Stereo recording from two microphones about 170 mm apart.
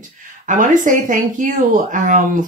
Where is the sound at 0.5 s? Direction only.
50° right (ahead or behind).